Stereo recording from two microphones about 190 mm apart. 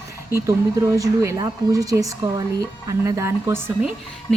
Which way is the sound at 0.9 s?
15° right (ahead or behind).